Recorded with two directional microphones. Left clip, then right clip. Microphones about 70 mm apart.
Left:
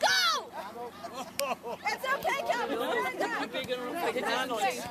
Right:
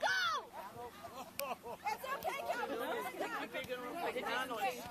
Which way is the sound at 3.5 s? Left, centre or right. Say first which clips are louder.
Left 9 dB; left.